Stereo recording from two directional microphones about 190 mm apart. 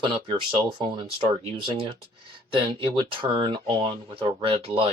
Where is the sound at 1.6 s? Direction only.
25° right (ahead or behind).